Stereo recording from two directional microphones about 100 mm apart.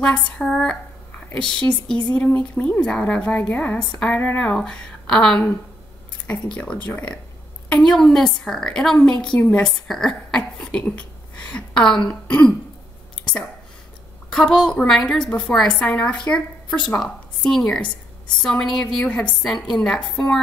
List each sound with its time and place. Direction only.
0.0 s a woman's voice: 10° left (ahead or behind)
13.2 s a sound: 10° left (ahead or behind)
14.3 s a woman's voice: 5° left (ahead or behind)